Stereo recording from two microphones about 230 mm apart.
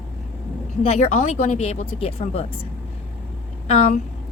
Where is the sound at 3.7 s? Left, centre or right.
Left.